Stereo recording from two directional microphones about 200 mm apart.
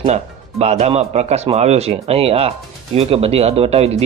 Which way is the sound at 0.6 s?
30° right (ahead or behind).